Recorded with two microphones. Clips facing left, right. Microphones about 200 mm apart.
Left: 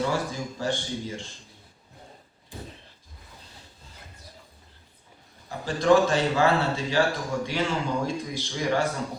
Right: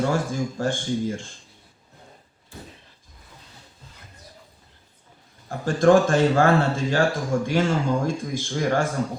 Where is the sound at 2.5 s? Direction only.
15° left (ahead or behind).